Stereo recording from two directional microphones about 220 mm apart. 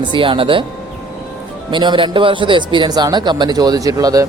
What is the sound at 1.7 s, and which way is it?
A man's voice, 20° right (ahead or behind).